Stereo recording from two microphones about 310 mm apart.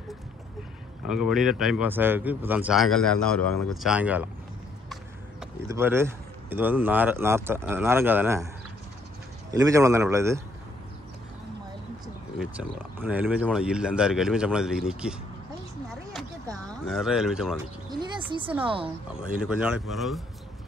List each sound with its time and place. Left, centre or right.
1.0 s speech: centre
5.4 s speech: centre
9.5 s speech: centre
12.4 s speech: centre
16.8 s speech: centre
17.8 s a sound: centre
19.3 s speech: centre